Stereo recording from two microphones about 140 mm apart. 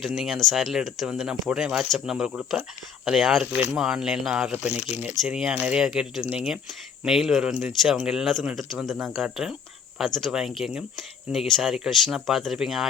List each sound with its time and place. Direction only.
0.0 s speech: centre (ahead or behind)
4.7 s speech: 50° left (ahead or behind)
5.2 s speech: 5° right (ahead or behind)